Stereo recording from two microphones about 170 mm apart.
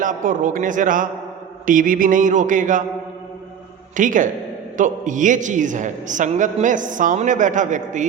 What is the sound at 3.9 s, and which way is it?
A man's voice, 50° right (ahead or behind).